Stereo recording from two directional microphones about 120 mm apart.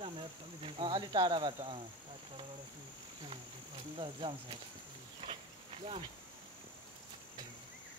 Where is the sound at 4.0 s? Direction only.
45° right (ahead or behind).